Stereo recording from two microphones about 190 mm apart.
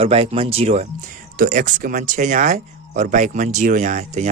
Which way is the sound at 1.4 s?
45° right (ahead or behind).